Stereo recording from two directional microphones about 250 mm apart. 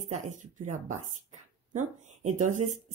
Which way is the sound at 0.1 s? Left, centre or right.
Right.